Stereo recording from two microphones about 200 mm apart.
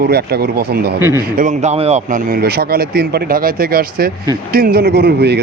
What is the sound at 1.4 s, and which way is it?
Speech, 35° right (ahead or behind).